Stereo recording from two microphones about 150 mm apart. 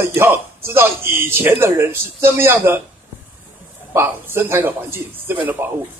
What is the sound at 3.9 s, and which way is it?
A man's voice, 15° right (ahead or behind).